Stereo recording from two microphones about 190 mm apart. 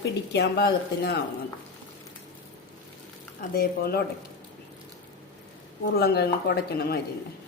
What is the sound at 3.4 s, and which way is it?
Speech, 55° left (ahead or behind).